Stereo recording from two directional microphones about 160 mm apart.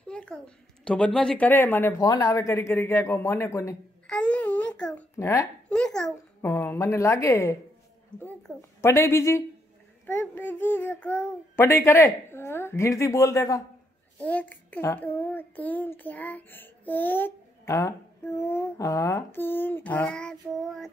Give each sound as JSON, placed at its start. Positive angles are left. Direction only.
{"t": 0.1, "sound": "a sound", "side_deg": 5}
{"t": 0.8, "sound": "child singing", "side_deg": 5}
{"t": 4.1, "sound": "a sound", "side_deg": 5}
{"t": 5.1, "sound": "speech", "side_deg": 20}
{"t": 5.7, "sound": "a child's voice", "side_deg": 5}
{"t": 6.4, "sound": "child singing", "side_deg": 15}
{"t": 8.2, "sound": "child singing", "side_deg": 5}